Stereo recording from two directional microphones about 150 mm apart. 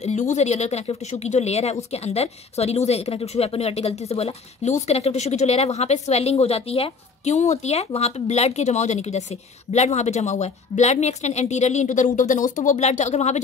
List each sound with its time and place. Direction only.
0.0 s speech: 50° left (ahead or behind)